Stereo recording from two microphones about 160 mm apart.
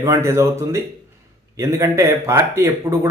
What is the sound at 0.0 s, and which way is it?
Speech, 20° right (ahead or behind).